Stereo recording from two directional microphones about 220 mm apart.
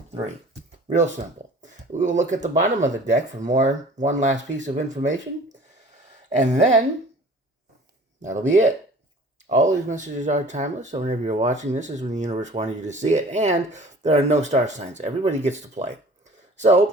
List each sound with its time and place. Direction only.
1.6 s speech: 35° right (ahead or behind)
6.2 s speech: 30° right (ahead or behind)
8.2 s speech: 35° right (ahead or behind)